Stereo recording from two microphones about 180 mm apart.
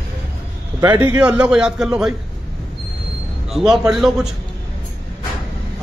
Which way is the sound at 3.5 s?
Centre (ahead or behind).